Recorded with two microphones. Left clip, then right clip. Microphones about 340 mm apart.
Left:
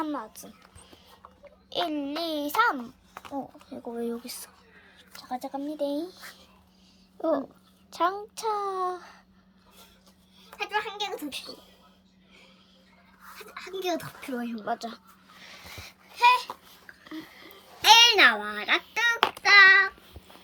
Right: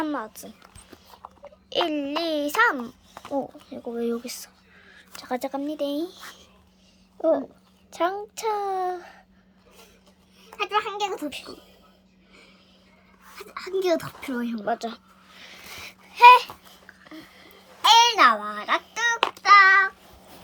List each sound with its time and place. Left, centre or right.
0.0 s speech: centre
1.7 s a woman's voice: centre
7.2 s a woman's voice: centre
10.7 s a child's voice: centre
13.3 s a child's voice: centre
14.6 s a sound: centre
18.2 s a child's voice: right
19.4 s child singing: right